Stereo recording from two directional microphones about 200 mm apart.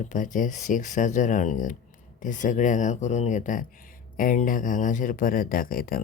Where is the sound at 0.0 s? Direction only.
40° left (ahead or behind).